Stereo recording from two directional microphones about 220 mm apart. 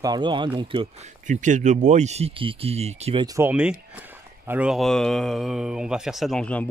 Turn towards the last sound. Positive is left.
turn(degrees=5)  # may be behind; listen again after turning